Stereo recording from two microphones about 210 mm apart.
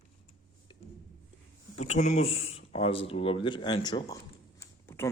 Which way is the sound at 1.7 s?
30° left (ahead or behind).